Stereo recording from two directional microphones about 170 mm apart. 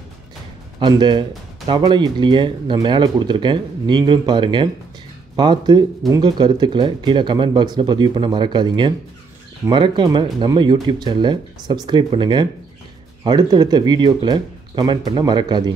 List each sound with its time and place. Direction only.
0.7 s speech: 30° right (ahead or behind)